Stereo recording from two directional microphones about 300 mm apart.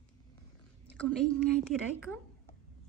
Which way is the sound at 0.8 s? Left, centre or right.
Centre.